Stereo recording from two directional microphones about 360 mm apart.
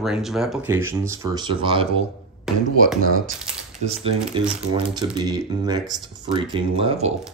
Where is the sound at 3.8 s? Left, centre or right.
Centre.